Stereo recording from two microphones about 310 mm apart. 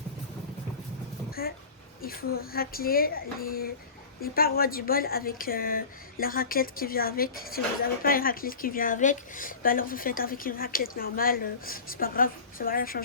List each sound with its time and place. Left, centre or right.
2.0 s speech: left